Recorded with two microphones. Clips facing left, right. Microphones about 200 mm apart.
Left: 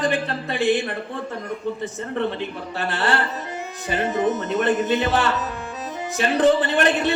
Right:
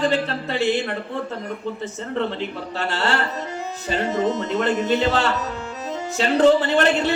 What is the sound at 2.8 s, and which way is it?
Speech, 15° left (ahead or behind).